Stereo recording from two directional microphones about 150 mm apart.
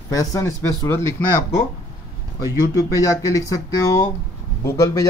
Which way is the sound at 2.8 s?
20° left (ahead or behind).